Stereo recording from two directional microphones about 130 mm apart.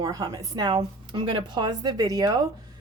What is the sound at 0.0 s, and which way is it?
A woman's voice, 30° right (ahead or behind).